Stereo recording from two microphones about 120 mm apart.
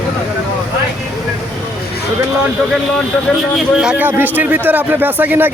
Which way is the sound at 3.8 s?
5° right (ahead or behind).